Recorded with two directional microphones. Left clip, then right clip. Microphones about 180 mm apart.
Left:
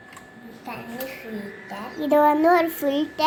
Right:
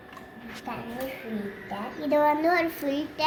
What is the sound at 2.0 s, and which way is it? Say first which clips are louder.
A child's voice: left 5 dB; 50° left (ahead or behind).